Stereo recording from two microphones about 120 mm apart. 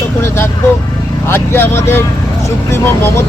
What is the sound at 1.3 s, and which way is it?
Speech, 20° left (ahead or behind).